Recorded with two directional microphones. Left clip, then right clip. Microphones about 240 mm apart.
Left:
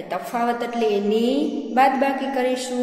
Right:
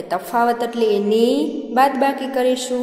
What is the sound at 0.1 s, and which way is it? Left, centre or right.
A woman's voice, right.